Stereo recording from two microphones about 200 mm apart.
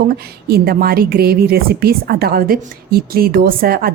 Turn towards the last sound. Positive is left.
turn(degrees=-45)  # may be behind; listen again after turning